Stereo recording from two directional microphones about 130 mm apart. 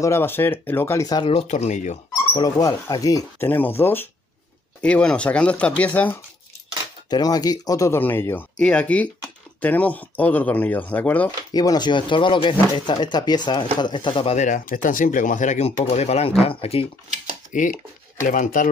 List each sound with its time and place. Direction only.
0.0 s speech: 20° left (ahead or behind)
1.0 s speech: 30° left (ahead or behind)
1.3 s speech: 60° left (ahead or behind)
2.3 s speech: 30° left (ahead or behind)
3.4 s speech: 15° left (ahead or behind)
7.1 s speech: 30° left (ahead or behind); by 11.3 s 10° left (ahead or behind)
11.5 s speech: 30° left (ahead or behind)
14.3 s speech: 70° left (ahead or behind); by 16.8 s 50° left (ahead or behind)
17.5 s speech: 85° left